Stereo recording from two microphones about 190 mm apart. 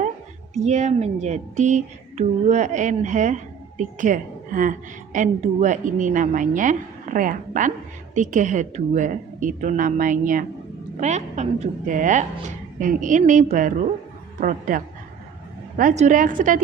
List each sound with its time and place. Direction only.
0.5 s a woman's voice: 35° right (ahead or behind)
15.8 s a woman's voice: 40° right (ahead or behind)